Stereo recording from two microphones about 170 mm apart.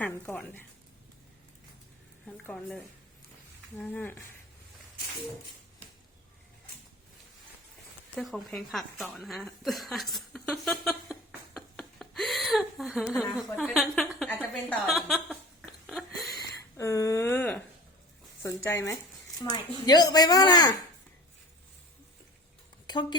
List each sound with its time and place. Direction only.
0.0 s speech: 10° left (ahead or behind)
2.2 s speech: 5° left (ahead or behind)
8.1 s a woman's voice: centre (ahead or behind)
16.7 s speech: 15° left (ahead or behind)
19.5 s speech: 25° left (ahead or behind)
22.9 s speech: 25° left (ahead or behind)